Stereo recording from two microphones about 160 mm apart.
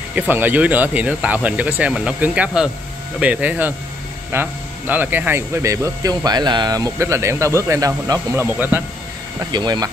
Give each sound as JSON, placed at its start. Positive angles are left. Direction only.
{"t": 0.1, "sound": "speech", "side_deg": -10}
{"t": 9.4, "sound": "speech", "side_deg": -25}